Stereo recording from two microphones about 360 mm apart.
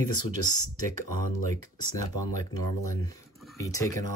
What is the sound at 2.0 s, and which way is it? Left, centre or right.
Speech, centre.